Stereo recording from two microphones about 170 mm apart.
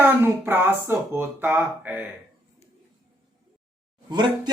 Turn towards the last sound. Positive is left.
turn(degrees=-25)  # may be behind; listen again after turning